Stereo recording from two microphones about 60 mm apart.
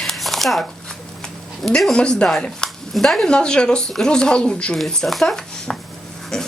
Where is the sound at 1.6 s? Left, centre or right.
Centre.